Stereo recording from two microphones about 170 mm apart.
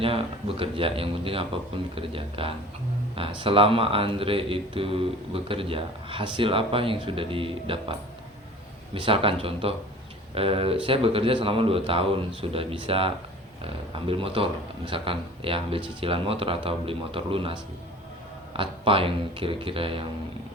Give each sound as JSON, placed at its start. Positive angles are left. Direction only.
{"t": 0.0, "sound": "speech", "side_deg": -35}